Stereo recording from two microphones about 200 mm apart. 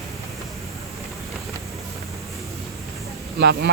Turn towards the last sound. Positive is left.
turn(degrees=-55)  # may be behind; listen again after turning